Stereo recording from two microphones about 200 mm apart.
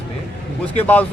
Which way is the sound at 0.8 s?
10° left (ahead or behind).